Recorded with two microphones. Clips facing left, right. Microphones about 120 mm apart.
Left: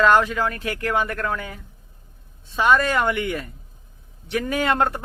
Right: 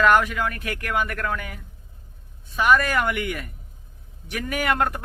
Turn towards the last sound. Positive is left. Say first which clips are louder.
# left 2 dB
turn(degrees=25)  # may be behind; listen again after turning